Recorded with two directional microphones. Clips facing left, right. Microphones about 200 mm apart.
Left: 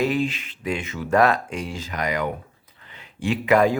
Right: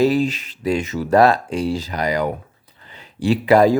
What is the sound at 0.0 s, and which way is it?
Speech, 35° right (ahead or behind).